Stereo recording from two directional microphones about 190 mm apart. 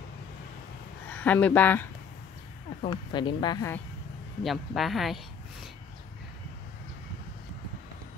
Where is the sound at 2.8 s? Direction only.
25° left (ahead or behind).